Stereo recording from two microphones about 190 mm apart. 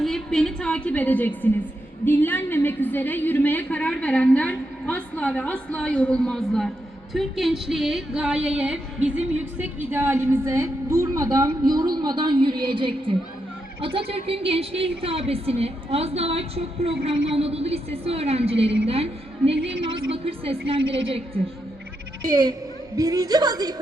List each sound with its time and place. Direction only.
0.0 s a woman's voice: centre (ahead or behind); by 23.8 s 20° right (ahead or behind)